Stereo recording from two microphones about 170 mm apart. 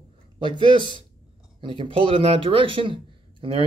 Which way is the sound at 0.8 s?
30° left (ahead or behind).